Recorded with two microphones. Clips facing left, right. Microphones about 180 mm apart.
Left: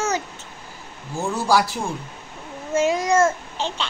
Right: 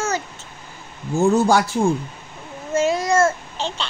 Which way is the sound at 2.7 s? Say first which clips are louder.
Right 1 dB; 15° left (ahead or behind).